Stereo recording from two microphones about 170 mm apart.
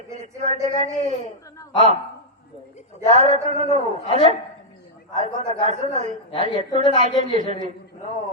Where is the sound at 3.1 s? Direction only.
40° right (ahead or behind).